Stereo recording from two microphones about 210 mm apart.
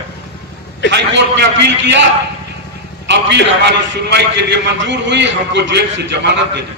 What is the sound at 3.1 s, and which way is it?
A man's voice, 55° right (ahead or behind).